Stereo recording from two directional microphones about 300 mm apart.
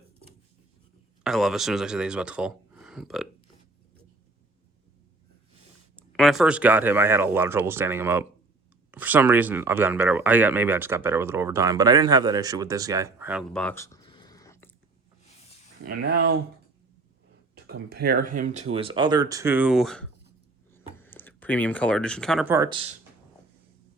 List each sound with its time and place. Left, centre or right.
1.2 s speech: centre
6.0 s speech: centre
15.8 s speech: right
17.5 s speech: right